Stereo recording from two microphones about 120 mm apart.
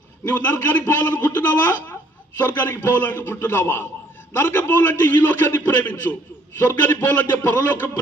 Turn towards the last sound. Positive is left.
turn(degrees=15)  # may be behind; listen again after turning